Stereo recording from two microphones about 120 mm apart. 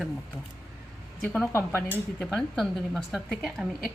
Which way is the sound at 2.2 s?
5° left (ahead or behind).